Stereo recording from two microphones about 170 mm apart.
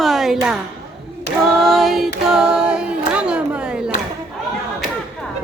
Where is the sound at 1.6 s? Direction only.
Centre (ahead or behind).